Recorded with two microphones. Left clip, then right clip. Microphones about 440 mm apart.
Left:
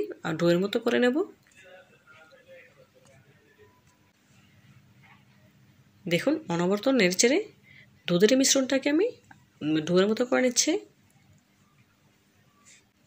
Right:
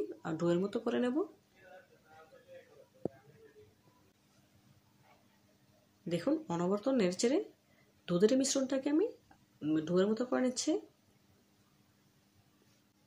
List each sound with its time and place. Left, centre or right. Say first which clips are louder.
0.2 s speech: left 9 dB; left
6.0 s speech: left 8 dB; left